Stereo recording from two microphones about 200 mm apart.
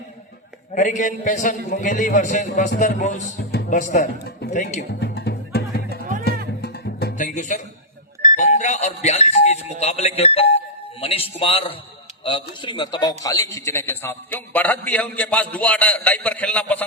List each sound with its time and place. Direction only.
0.7 s a man's voice: 40° left (ahead or behind)
4.9 s music: 55° left (ahead or behind); by 7.6 s 40° left (ahead or behind)
8.3 s a man's voice: 35° left (ahead or behind); by 16.8 s 5° left (ahead or behind)